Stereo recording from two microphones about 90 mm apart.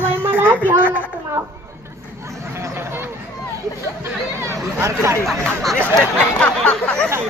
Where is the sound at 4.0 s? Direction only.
30° right (ahead or behind).